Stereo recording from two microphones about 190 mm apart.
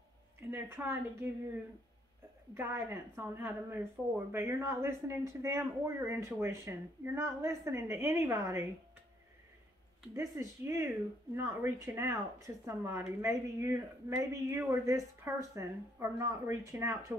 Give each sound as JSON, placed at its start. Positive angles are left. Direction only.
{"t": 0.4, "sound": "speech", "side_deg": -10}
{"t": 2.5, "sound": "speech", "side_deg": -10}
{"t": 10.1, "sound": "speech", "side_deg": -15}